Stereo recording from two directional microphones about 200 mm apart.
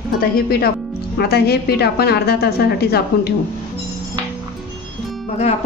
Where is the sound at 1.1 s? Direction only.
50° left (ahead or behind).